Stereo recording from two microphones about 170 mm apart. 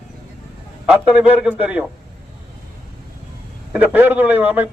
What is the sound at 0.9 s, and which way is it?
Speech, 10° right (ahead or behind).